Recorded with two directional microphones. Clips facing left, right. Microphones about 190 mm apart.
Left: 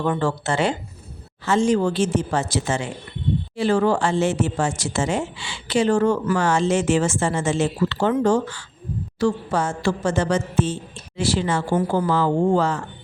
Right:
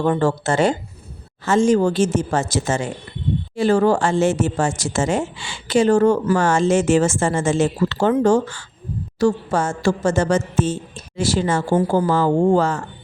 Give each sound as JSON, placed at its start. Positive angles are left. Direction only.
{"t": 0.0, "sound": "speech", "side_deg": -40}